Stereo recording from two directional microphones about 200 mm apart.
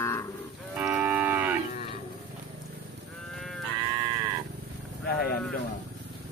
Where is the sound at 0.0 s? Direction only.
15° left (ahead or behind).